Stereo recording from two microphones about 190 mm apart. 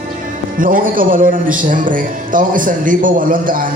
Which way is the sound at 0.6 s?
45° right (ahead or behind).